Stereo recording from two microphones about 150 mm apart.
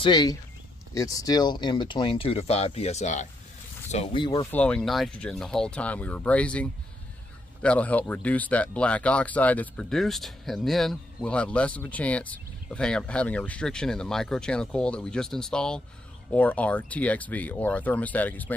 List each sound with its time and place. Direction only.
0.0 s speech: 25° left (ahead or behind); by 3.3 s 50° left (ahead or behind)
3.9 s speech: 40° left (ahead or behind)
4.5 s speech: 10° left (ahead or behind)